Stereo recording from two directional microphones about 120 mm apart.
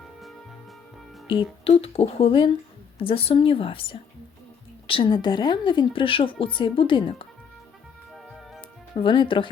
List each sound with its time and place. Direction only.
1.3 s speech: 50° left (ahead or behind)
8.1 s music: centre (ahead or behind)
9.0 s speech: 45° left (ahead or behind)